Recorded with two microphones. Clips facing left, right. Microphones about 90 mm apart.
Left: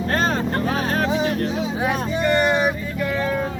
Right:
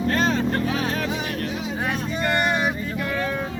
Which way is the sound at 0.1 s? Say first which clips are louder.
Left 1 dB; 45° left (ahead or behind).